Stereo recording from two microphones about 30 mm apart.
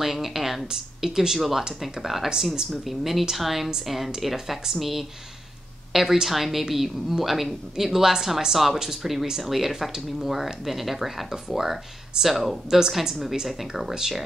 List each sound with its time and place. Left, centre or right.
0.0 s a sound: centre
0.7 s speech: centre
12.6 s speech: right
13.1 s speech: centre